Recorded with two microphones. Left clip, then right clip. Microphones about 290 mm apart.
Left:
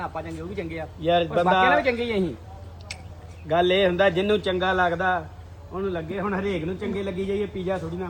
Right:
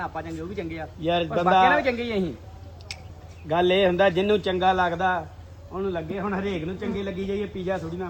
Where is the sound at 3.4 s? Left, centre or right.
Centre.